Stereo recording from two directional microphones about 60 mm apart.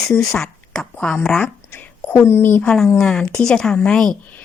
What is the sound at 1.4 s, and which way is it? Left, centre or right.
Speech, left.